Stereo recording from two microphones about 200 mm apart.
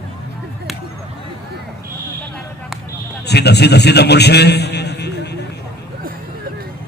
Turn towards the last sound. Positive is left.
turn(degrees=55)  # may be behind; listen again after turning